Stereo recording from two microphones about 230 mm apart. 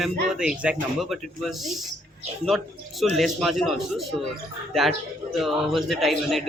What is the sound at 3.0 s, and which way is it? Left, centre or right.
Speech, centre.